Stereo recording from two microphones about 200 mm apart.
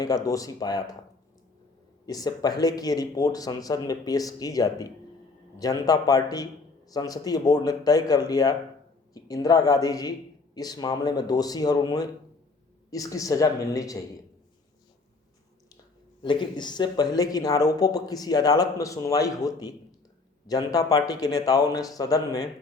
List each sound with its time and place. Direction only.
0.0 s speech: 20° left (ahead or behind)
2.0 s speech: 20° left (ahead or behind)
16.2 s speech: 25° left (ahead or behind)